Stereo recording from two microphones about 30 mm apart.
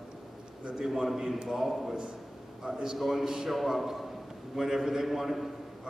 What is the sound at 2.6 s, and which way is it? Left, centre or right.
Speech, right.